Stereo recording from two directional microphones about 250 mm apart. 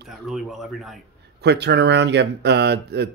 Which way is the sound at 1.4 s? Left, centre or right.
Right.